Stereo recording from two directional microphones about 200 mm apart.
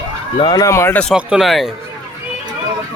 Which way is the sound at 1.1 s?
Centre (ahead or behind).